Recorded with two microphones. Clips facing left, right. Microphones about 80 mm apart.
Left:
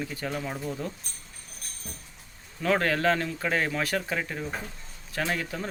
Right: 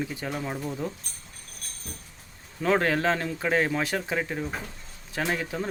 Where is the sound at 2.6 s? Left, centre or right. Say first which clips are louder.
Right 1 dB; right.